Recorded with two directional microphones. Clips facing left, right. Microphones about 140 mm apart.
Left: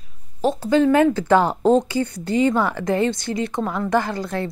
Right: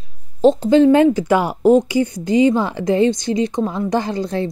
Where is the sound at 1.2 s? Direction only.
10° right (ahead or behind).